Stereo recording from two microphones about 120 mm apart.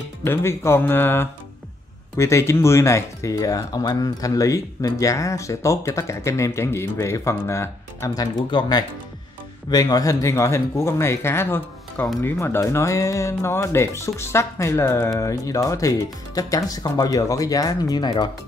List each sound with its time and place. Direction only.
0.2 s speech: 20° left (ahead or behind); by 18.3 s 35° left (ahead or behind)